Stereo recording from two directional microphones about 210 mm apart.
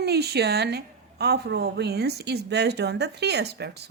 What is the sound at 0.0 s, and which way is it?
A woman's voice, 50° right (ahead or behind).